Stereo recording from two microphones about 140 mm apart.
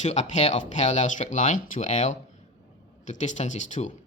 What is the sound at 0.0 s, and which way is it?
Speech, 55° left (ahead or behind).